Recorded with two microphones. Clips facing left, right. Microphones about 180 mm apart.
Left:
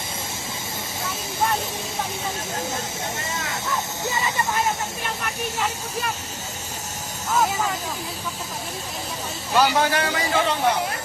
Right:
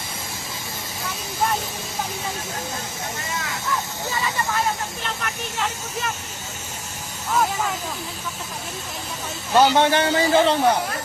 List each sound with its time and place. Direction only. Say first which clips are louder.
5.2 s speech: left 1 dB; 5° left (ahead or behind)
9.6 s a man's voice: right 3 dB; 25° right (ahead or behind)